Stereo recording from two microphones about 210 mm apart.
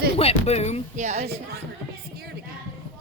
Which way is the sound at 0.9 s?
35° right (ahead or behind).